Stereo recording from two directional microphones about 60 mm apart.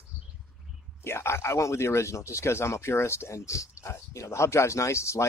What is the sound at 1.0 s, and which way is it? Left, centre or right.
Speech, left.